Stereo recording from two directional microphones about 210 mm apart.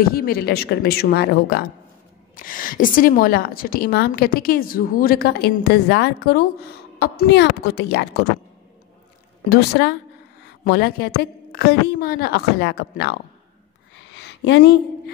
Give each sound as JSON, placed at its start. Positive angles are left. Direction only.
{"t": 0.0, "sound": "a woman's voice", "side_deg": 45}
{"t": 9.5, "sound": "a woman's voice", "side_deg": 50}
{"t": 13.9, "sound": "a sound", "side_deg": 55}